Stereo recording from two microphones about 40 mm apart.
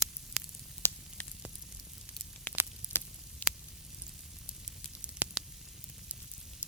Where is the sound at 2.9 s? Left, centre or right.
Left.